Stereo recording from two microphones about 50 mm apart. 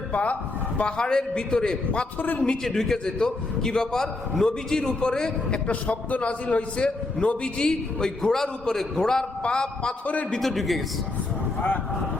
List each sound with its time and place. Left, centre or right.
0.1 s a man's voice: left
2.1 s a man's voice: left
2.4 s a man's voice: centre
10.4 s a man's voice: centre